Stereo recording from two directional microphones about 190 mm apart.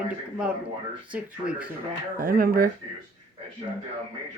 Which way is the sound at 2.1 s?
50° right (ahead or behind).